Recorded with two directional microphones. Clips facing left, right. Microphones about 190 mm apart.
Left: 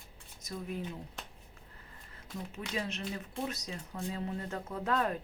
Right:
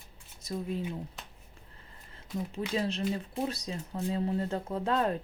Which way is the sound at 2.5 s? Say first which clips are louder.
Right 6 dB; 30° right (ahead or behind).